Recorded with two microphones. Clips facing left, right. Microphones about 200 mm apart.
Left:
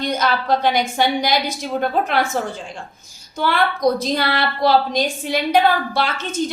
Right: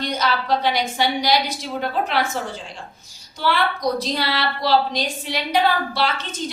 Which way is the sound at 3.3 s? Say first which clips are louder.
Left 2 dB; 50° left (ahead or behind).